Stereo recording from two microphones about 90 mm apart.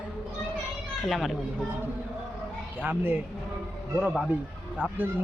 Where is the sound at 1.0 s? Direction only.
Centre (ahead or behind).